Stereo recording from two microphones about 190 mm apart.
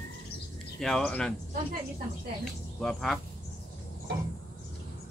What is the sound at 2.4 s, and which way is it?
Speech, centre (ahead or behind).